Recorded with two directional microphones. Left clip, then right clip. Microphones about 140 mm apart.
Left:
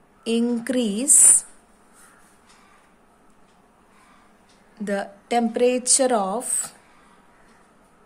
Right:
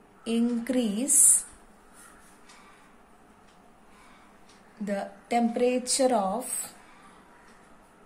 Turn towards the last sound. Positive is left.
turn(degrees=65)  # may be behind; listen again after turning